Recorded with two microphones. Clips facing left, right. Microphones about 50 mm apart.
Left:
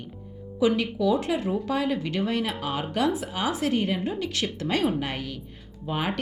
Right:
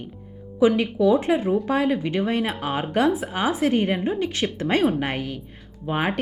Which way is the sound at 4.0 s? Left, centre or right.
Centre.